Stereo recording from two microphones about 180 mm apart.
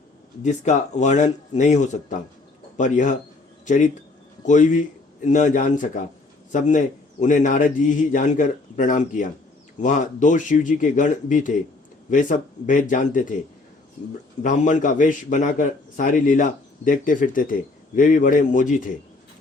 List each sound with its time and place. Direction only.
0.4 s a man's voice: 40° left (ahead or behind)